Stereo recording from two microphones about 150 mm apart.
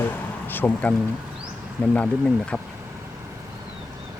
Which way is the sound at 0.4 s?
10° left (ahead or behind).